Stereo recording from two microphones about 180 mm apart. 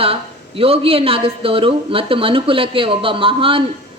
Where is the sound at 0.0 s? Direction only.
30° right (ahead or behind).